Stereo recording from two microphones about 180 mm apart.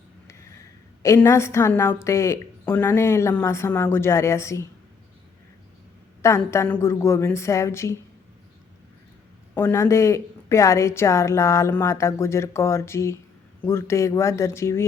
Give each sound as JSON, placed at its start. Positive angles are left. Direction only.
{"t": 1.0, "sound": "a woman's voice", "side_deg": 15}
{"t": 6.2, "sound": "a woman's voice", "side_deg": 15}
{"t": 9.6, "sound": "a woman's voice", "side_deg": 15}